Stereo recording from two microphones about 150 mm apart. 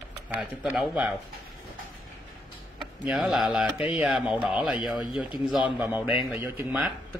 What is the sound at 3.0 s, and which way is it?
A man's voice, 5° right (ahead or behind).